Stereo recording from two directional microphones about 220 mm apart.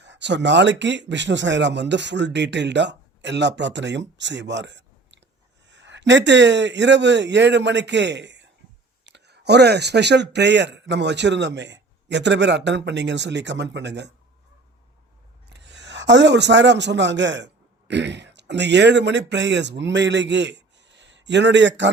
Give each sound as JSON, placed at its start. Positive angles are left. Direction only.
{"t": 0.0, "sound": "speech", "side_deg": -55}
{"t": 15.4, "sound": "speech", "side_deg": -50}